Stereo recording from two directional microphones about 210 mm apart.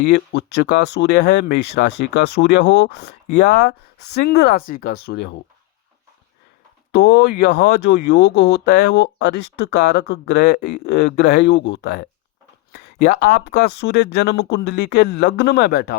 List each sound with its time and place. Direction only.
0.0 s speech: 55° left (ahead or behind)
6.9 s speech: 50° left (ahead or behind)